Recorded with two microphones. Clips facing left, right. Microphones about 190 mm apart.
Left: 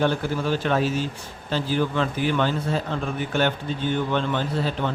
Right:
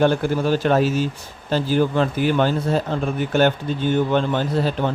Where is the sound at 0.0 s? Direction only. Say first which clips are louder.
Right 5 dB; 40° right (ahead or behind).